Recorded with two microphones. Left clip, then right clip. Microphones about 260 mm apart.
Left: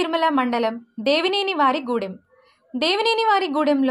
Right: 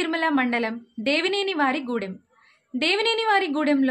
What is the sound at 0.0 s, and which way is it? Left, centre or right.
A woman's voice, centre.